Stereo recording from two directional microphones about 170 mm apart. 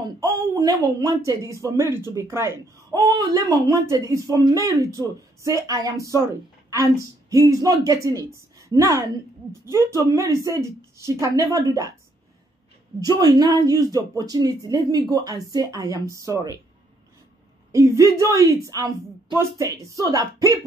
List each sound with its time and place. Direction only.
0.2 s a sound: 20° right (ahead or behind)
1.0 s speech: 20° right (ahead or behind)
13.0 s speech: 20° right (ahead or behind)
17.7 s speech: 15° right (ahead or behind)